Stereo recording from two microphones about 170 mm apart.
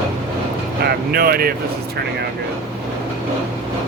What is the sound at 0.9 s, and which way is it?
Speech, 65° right (ahead or behind).